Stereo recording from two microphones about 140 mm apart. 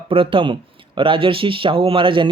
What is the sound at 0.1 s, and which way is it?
Speech, 40° right (ahead or behind).